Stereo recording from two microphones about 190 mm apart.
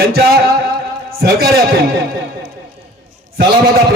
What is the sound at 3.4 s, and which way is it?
Speech, 50° right (ahead or behind).